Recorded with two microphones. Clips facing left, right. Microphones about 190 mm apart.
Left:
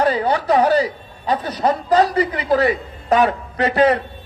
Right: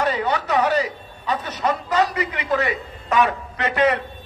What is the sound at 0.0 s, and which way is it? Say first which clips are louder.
A man's voice: left 4 dB; 35° left (ahead or behind).